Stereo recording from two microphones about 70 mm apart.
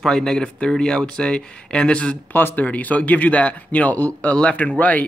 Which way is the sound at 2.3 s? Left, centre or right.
Left.